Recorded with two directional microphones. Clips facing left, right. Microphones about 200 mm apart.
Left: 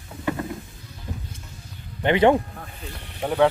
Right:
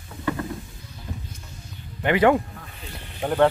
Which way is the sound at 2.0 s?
20° left (ahead or behind).